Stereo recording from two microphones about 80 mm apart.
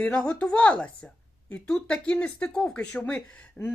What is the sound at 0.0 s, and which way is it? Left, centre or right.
Speech, centre.